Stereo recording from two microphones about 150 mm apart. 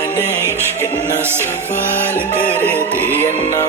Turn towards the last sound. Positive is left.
turn(degrees=15)  # may be behind; listen again after turning